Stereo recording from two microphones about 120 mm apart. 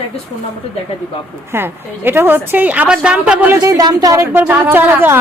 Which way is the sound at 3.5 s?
30° right (ahead or behind).